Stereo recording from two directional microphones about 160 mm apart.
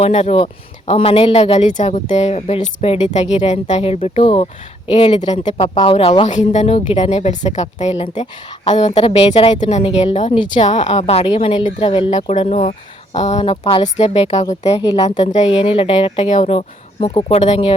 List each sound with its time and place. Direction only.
0.0 s a woman's voice: 45° left (ahead or behind)
10.3 s a woman's voice: 30° left (ahead or behind)
10.6 s a woman's voice: 40° left (ahead or behind)